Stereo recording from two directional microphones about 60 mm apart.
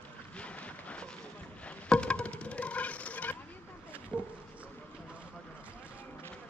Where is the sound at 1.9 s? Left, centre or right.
Centre.